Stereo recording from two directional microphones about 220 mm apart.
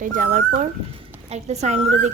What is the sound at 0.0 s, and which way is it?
A woman's voice, 35° right (ahead or behind).